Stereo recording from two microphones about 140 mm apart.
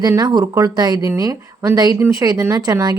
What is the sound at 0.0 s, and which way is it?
Speech, 25° right (ahead or behind).